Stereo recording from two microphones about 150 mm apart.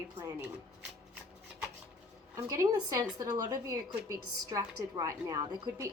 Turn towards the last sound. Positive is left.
turn(degrees=-25)  # may be behind; listen again after turning